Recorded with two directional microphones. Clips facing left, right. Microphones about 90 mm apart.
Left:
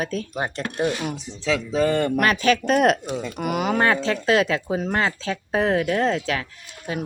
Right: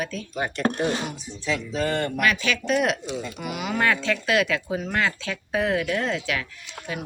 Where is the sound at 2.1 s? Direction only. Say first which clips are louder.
Left 5 dB; 40° left (ahead or behind).